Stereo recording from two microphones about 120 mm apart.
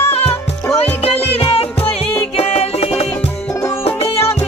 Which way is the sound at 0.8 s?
55° left (ahead or behind).